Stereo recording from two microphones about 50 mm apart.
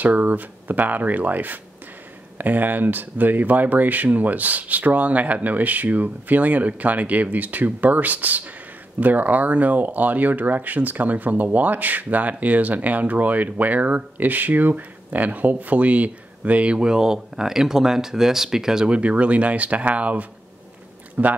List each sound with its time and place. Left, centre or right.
0.0 s speech: right
16.7 s speech: centre
18.9 s speech: right